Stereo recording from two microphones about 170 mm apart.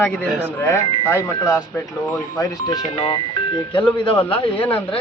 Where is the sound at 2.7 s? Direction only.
35° left (ahead or behind).